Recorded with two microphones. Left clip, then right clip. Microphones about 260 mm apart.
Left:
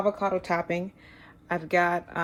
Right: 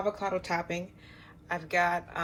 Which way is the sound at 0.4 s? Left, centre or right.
Left.